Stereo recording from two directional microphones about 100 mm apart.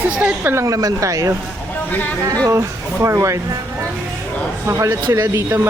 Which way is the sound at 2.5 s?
25° right (ahead or behind).